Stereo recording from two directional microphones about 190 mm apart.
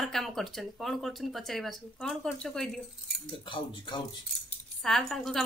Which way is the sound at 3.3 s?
25° left (ahead or behind).